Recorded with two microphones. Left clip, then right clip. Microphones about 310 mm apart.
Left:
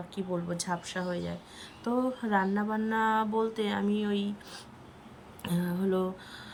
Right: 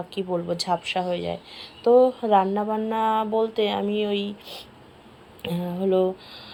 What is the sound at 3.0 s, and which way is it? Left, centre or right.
Speech, centre.